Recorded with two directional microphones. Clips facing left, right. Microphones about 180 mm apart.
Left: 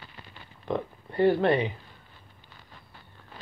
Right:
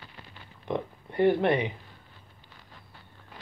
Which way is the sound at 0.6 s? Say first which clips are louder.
Left 1 dB; 20° right (ahead or behind).